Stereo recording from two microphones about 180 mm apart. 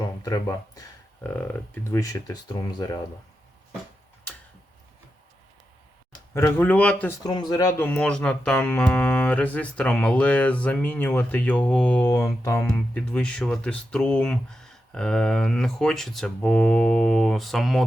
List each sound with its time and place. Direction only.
0.2 s speech: 20° left (ahead or behind)
1.2 s speech: 10° left (ahead or behind)
6.3 s speech: 15° left (ahead or behind)
7.3 s speech: 20° left (ahead or behind); by 17.8 s centre (ahead or behind)